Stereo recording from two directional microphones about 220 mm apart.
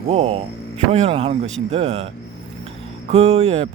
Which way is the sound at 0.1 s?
25° right (ahead or behind).